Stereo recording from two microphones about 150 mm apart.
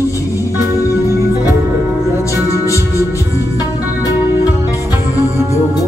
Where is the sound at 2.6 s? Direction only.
20° left (ahead or behind).